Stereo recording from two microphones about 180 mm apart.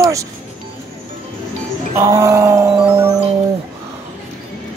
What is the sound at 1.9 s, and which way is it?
Music, 15° right (ahead or behind).